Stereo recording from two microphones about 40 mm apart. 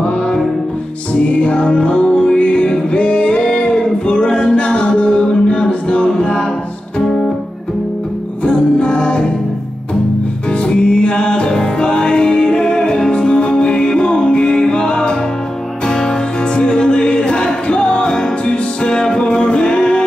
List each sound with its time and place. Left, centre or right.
1.1 s music: left
3.5 s singing: left
4.2 s music: left
6.1 s a capella: left
8.5 s music: left
10.6 s music: left
16.5 s music: left